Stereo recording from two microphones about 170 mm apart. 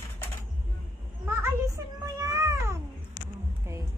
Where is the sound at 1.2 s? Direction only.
15° right (ahead or behind).